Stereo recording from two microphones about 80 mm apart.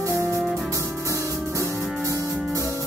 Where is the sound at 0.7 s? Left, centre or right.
Right.